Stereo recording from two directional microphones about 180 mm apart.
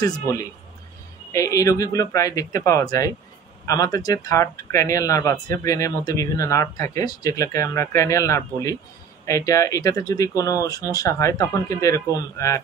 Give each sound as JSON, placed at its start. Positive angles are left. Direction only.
{"t": 0.0, "sound": "speech", "side_deg": 20}